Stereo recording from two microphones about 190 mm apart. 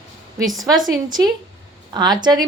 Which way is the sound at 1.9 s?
20° right (ahead or behind).